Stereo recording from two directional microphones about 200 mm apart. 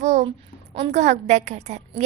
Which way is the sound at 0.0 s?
35° right (ahead or behind).